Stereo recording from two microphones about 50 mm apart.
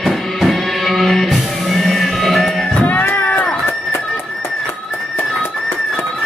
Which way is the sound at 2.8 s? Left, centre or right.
Left.